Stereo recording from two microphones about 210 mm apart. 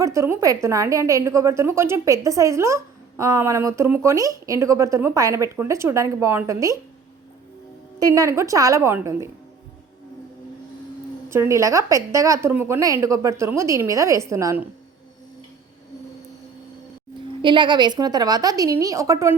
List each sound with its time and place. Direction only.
0.0 s a woman's voice: 15° right (ahead or behind)
7.9 s a woman's voice: 15° right (ahead or behind)
11.3 s a woman's voice: 15° right (ahead or behind)
17.4 s a woman's voice: 20° right (ahead or behind)